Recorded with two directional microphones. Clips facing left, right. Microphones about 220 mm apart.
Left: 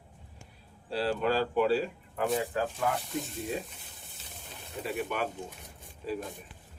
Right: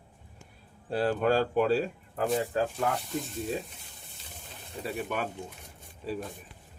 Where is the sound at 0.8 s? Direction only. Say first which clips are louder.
Right 3 dB; 50° right (ahead or behind).